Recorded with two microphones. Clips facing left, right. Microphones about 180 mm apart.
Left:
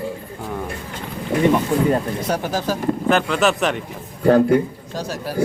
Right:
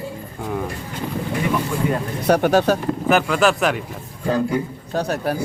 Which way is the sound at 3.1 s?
5° right (ahead or behind).